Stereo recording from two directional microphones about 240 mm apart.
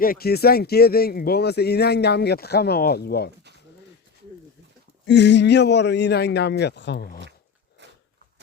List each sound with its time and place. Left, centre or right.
0.0 s speech: left
5.0 s speech: left